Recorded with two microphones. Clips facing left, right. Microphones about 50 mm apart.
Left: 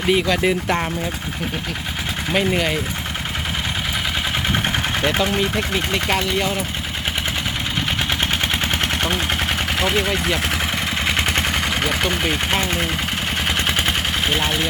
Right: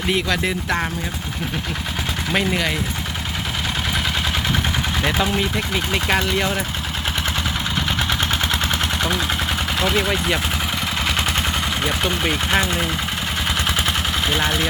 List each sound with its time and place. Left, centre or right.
0.1 s speech: centre
2.3 s speech: centre
5.7 s speech: centre
8.7 s gunshot: left
11.0 s vehicle: left
13.7 s vehicle: left